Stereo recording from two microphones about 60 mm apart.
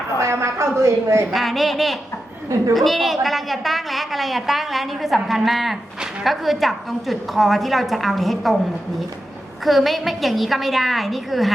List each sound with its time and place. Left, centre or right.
0.2 s a sound: right
1.3 s a woman's voice: centre
9.6 s a woman's voice: centre